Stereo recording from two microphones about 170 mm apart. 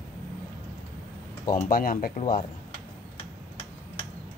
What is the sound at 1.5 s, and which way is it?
Speech, 55° left (ahead or behind).